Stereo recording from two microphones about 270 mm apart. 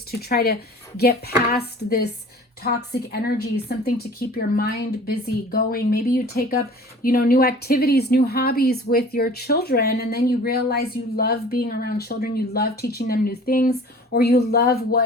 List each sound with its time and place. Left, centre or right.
0.1 s speech: left